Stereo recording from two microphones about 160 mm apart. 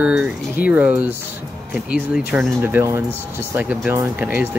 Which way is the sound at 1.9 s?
5° right (ahead or behind).